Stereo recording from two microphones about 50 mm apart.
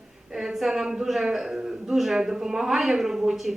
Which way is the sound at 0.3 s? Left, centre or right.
Centre.